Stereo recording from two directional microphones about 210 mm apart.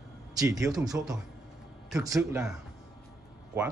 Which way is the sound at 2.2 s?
5° right (ahead or behind).